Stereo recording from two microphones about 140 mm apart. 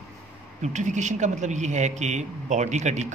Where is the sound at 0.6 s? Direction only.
60° right (ahead or behind).